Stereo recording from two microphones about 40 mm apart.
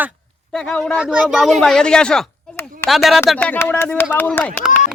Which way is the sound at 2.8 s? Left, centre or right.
Centre.